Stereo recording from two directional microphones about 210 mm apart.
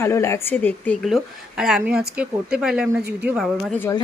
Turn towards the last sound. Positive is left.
turn(degrees=15)  # may be behind; listen again after turning